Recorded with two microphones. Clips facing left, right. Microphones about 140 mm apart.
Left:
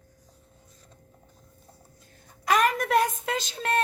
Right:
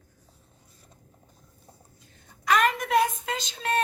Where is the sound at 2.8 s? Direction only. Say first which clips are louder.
Even; 45° left (ahead or behind).